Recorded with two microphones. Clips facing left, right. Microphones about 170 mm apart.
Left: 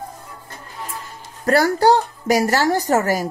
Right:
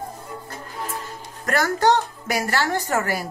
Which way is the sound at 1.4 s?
30° left (ahead or behind).